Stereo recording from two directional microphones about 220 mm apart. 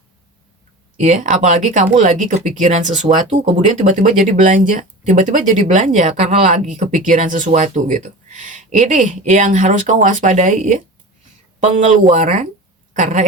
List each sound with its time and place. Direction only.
0.9 s speech: 30° right (ahead or behind)